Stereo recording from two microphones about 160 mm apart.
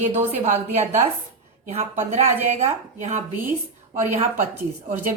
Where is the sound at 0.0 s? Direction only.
45° right (ahead or behind).